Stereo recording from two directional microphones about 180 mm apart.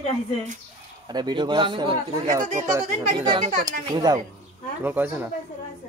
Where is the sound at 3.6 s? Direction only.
20° right (ahead or behind).